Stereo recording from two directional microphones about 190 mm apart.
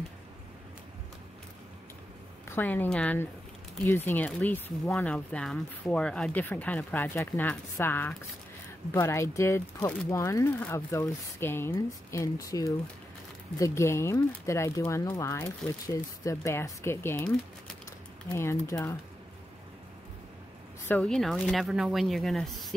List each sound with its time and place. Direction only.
2.5 s speech: 10° left (ahead or behind)
18.3 s speech: 15° left (ahead or behind)
20.9 s speech: 5° left (ahead or behind)